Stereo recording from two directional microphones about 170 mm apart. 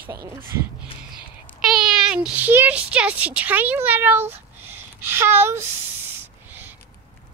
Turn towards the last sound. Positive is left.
turn(degrees=-15)  # may be behind; listen again after turning